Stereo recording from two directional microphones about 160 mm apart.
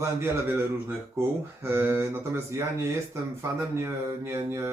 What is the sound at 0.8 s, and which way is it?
Speech, 15° right (ahead or behind).